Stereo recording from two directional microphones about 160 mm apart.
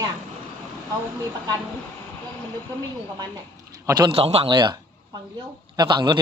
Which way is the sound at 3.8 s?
25° right (ahead or behind).